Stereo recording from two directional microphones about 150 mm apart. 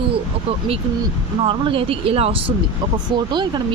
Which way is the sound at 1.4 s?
35° right (ahead or behind).